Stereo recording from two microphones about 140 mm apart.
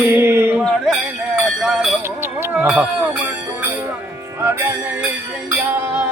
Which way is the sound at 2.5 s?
5° right (ahead or behind).